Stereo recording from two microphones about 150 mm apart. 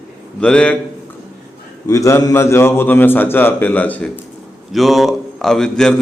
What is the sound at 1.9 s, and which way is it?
A man's voice, 20° left (ahead or behind).